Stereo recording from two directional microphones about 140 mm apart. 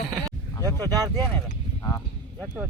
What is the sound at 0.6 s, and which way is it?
Vehicle, 20° left (ahead or behind).